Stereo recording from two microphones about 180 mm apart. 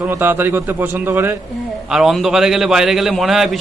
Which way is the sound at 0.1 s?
10° right (ahead or behind).